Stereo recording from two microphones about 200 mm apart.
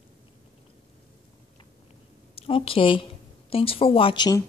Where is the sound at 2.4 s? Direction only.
25° left (ahead or behind).